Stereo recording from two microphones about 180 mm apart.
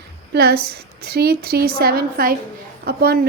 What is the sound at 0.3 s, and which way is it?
A woman's voice, 60° right (ahead or behind).